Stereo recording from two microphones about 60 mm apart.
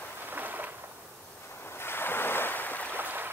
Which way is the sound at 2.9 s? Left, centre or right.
Right.